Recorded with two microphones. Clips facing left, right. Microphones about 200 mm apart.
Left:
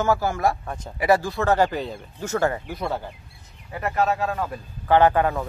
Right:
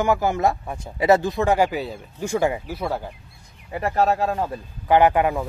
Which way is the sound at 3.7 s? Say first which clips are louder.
Right 3 dB; 30° right (ahead or behind).